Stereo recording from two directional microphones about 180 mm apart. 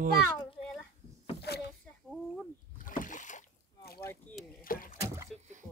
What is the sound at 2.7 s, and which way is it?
Boat, 50° left (ahead or behind).